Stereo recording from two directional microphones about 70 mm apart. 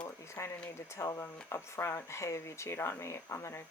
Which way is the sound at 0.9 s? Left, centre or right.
Left.